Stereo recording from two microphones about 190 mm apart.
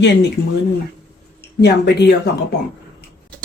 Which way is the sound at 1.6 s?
60° left (ahead or behind).